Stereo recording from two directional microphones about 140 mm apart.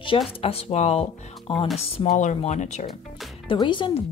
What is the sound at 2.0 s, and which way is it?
Speech, 60° left (ahead or behind).